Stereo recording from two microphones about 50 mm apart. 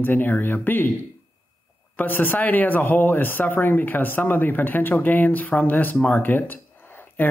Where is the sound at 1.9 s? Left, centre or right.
Left.